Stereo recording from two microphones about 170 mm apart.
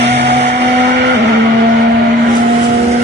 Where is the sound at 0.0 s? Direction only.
80° right.